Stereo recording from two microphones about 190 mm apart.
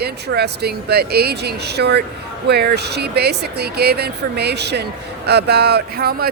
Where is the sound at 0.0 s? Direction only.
60° right (ahead or behind).